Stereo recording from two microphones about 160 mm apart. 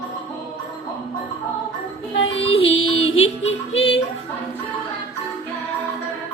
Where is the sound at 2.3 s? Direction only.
35° left (ahead or behind).